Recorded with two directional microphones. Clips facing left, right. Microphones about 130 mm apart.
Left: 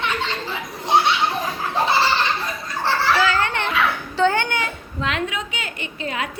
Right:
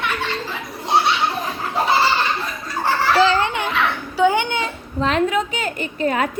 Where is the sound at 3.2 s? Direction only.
20° right (ahead or behind).